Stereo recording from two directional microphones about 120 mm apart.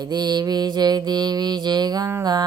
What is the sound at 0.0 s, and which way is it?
Mantra, 35° right (ahead or behind).